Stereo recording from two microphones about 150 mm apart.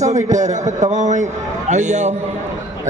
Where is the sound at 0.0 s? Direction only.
50° right (ahead or behind).